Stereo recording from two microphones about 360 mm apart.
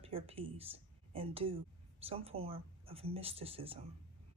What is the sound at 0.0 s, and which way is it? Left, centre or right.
Speech, centre.